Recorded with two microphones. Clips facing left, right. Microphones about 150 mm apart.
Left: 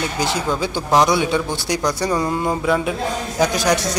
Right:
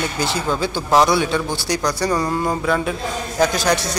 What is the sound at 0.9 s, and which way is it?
Speech, centre (ahead or behind).